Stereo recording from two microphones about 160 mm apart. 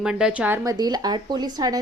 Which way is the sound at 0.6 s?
25° right (ahead or behind).